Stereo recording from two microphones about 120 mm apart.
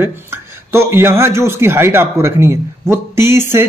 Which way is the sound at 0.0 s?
20° right (ahead or behind).